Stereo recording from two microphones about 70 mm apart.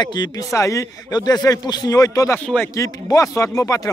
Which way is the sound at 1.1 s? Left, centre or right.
Left.